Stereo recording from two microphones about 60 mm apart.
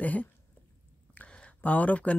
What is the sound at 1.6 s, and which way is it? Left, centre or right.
Speech, left.